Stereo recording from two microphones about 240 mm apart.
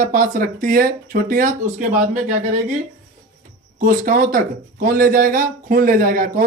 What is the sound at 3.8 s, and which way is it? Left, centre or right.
Speech, right.